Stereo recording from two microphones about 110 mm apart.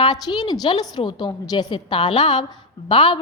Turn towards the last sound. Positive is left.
turn(degrees=50)  # may be behind; listen again after turning